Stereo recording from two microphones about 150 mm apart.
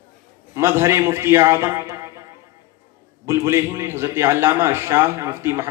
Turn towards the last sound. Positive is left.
turn(degrees=-20)  # may be behind; listen again after turning